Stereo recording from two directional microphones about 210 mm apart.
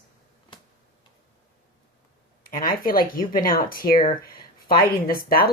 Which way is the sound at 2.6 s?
45° left (ahead or behind).